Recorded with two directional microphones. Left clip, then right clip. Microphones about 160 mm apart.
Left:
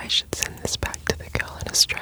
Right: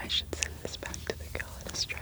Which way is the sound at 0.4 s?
90° left.